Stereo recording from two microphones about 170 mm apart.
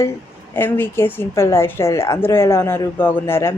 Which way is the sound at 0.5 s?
10° left (ahead or behind).